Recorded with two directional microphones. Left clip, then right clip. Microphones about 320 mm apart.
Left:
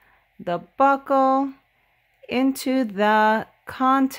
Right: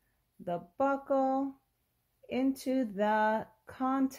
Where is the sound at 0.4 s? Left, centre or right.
Left.